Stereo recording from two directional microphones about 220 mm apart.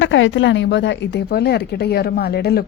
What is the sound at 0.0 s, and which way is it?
A woman's voice, 60° left (ahead or behind).